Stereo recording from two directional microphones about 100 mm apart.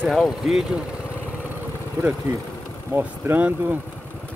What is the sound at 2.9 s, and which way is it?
Speech, 15° right (ahead or behind).